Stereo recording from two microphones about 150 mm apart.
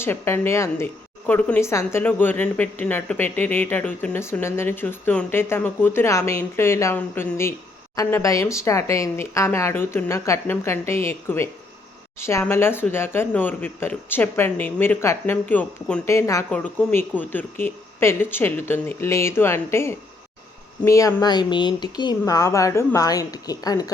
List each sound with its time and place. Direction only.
0.0 s a woman's voice: 15° left (ahead or behind)